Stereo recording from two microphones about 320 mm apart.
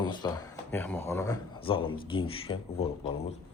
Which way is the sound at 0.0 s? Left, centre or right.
Centre.